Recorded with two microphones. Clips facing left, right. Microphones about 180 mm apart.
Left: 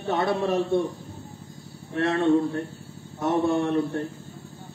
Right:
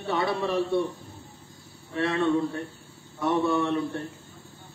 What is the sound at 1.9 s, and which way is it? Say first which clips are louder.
Speech: left 3 dB; 45° left (ahead or behind).